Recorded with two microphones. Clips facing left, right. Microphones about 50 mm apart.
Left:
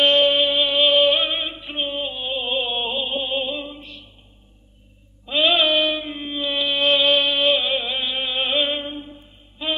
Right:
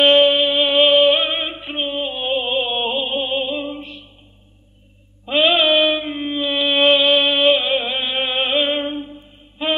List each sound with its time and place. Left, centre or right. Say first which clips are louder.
0.0 s a sound: right 4 dB; centre
0.7 s music: right 4 dB; centre
0.9 s female singing: right 3 dB; centre
1.8 s music: right 3 dB; centre
2.1 s music: right 6 dB; right
2.4 s music: right 3 dB; centre
3.6 s music: right 7 dB; right
5.4 s a sound: right 3 dB; centre
6.7 s a sound: right 6 dB; right
7.0 s music: right 3 dB; centre
7.8 s music: right 4 dB; right
8.4 s music: right 3 dB; centre
8.8 s a sound: right 6 dB; right